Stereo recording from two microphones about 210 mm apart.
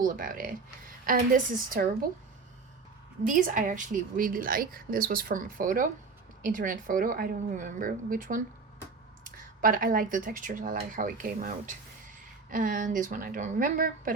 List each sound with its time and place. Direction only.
0.0 s a woman's voice: 40° right (ahead or behind)
3.2 s a woman's voice: 40° right (ahead or behind)